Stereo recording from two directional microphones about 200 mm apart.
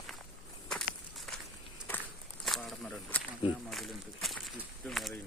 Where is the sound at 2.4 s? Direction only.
Centre (ahead or behind).